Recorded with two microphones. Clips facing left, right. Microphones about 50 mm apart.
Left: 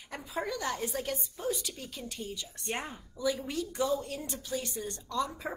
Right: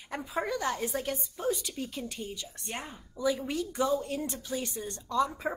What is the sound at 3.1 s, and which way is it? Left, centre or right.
A woman's voice, right.